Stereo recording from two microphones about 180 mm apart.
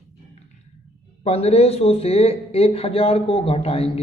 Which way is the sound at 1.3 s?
35° left (ahead or behind).